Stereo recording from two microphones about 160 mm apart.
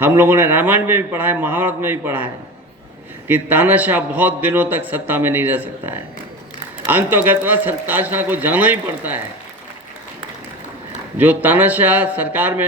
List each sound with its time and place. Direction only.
0.0 s a man's voice: 15° right (ahead or behind)
11.2 s a man's voice: 10° right (ahead or behind)